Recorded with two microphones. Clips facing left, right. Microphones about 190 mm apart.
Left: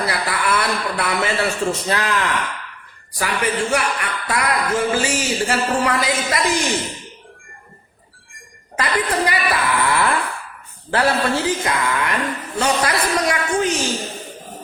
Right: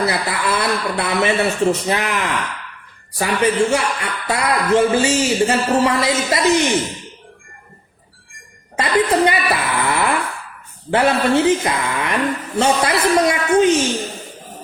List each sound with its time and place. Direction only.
0.0 s a man's voice: 25° right (ahead or behind)
8.8 s speech: 25° right (ahead or behind)